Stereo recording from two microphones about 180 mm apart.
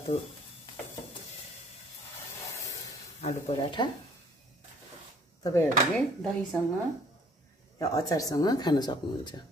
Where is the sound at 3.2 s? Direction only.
35° left (ahead or behind).